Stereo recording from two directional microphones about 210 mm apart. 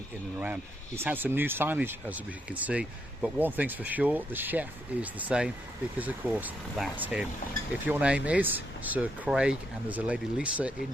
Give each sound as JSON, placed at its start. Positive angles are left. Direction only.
{"t": 0.3, "sound": "speech", "side_deg": -10}